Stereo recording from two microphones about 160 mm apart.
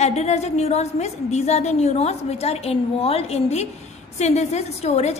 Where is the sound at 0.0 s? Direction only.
45° left (ahead or behind).